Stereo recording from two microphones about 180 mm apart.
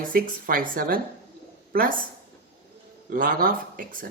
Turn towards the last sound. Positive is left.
turn(degrees=-50)  # may be behind; listen again after turning